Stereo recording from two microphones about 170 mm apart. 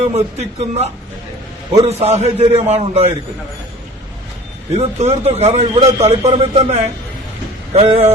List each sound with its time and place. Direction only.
0.1 s a man's voice: 40° right (ahead or behind)
4.9 s a man's voice: 40° right (ahead or behind)